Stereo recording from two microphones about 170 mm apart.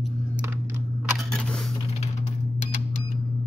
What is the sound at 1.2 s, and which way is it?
Camera, 5° left (ahead or behind).